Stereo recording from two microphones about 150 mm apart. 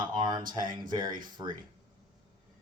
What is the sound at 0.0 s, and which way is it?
Speech, 30° right (ahead or behind).